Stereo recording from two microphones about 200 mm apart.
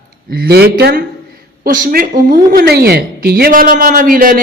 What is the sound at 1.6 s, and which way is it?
A woman's voice, 45° right (ahead or behind).